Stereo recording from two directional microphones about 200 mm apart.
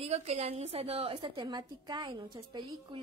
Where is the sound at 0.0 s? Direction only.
30° right (ahead or behind).